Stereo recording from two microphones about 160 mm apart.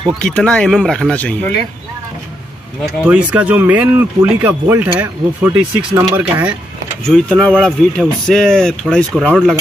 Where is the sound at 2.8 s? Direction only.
10° right (ahead or behind).